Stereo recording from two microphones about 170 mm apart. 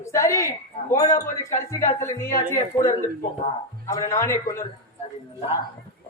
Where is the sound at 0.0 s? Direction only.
15° left (ahead or behind).